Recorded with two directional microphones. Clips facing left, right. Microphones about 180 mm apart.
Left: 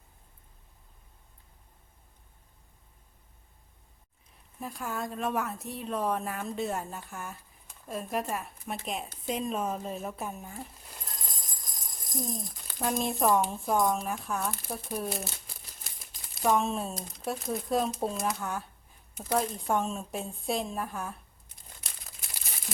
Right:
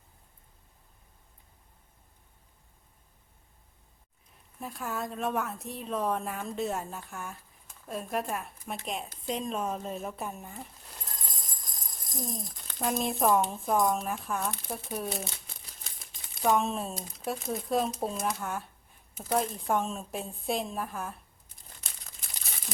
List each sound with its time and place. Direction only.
4.6 s speech: centre (ahead or behind)
21.8 s crumpling: 5° left (ahead or behind)